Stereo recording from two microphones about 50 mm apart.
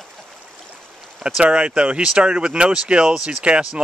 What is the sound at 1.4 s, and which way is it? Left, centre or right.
Speech, centre.